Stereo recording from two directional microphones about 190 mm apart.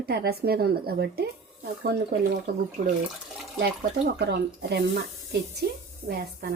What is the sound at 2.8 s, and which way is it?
Speech, 50° right (ahead or behind).